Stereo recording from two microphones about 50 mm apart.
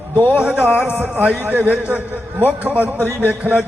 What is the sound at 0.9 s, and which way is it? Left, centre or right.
A man's voice, right.